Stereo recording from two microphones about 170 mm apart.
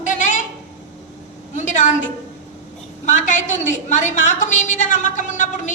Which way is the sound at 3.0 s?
45° left (ahead or behind).